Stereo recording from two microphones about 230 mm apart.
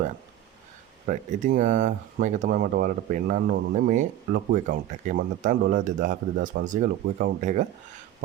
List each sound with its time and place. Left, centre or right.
1.0 s speech: right